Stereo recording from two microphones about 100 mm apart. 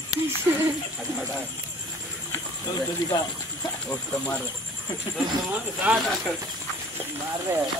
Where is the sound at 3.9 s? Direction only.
20° left (ahead or behind).